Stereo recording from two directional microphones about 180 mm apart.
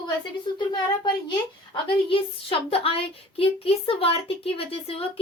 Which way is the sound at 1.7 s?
30° left (ahead or behind).